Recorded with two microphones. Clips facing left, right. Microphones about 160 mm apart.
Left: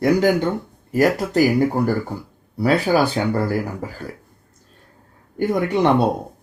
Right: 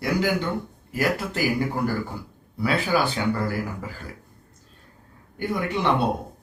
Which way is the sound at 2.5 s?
40° left (ahead or behind).